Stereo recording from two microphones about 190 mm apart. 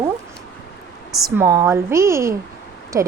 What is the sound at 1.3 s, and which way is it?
Speech, 15° right (ahead or behind).